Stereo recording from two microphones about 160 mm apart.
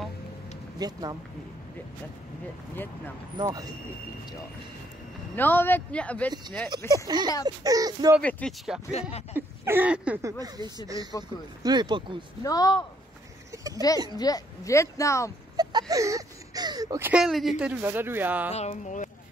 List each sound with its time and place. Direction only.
0.7 s speech: 25° right (ahead or behind)
3.3 s speech: 25° right (ahead or behind)
5.3 s a man's voice: 10° left (ahead or behind)
6.9 s speech: 25° right (ahead or behind)
8.2 s a man's voice: 10° left (ahead or behind)
9.3 s a sound: 10° right (ahead or behind)
10.4 s speech: 25° right (ahead or behind)
12.4 s speech: 25° left (ahead or behind)
14.1 s speech: 25° left (ahead or behind)
15.5 s a sound: 25° right (ahead or behind)
17.1 s speech: centre (ahead or behind)
18.5 s speech: 45° left (ahead or behind)